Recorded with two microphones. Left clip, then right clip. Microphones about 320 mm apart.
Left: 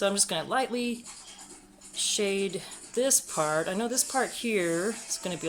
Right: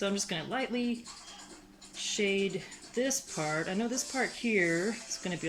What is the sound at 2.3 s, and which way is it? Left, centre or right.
Speech, centre.